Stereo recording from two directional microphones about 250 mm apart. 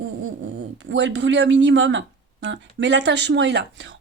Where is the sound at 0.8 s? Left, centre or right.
Right.